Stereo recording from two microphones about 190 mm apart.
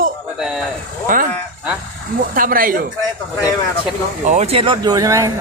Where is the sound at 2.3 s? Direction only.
50° right (ahead or behind).